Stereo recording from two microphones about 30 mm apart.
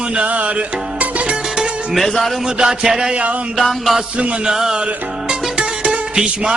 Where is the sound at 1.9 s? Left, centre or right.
Centre.